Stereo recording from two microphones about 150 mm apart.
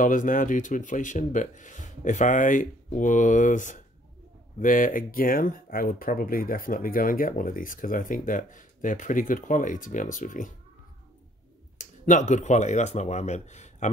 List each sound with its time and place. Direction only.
0.0 s speech: 60° left (ahead or behind)
11.8 s speech: 55° left (ahead or behind)